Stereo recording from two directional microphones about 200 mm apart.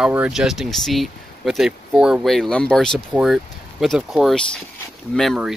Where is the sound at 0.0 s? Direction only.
5° right (ahead or behind).